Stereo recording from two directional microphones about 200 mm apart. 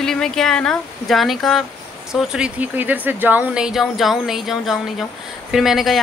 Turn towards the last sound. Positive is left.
turn(degrees=0)  # may be behind; listen again after turning